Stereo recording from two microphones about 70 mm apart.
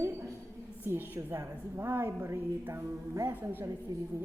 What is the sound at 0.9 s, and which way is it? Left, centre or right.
Speech, right.